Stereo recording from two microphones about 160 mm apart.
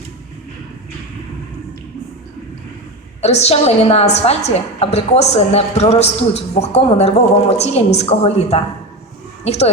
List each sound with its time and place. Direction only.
3.2 s a woman's voice: 40° left (ahead or behind)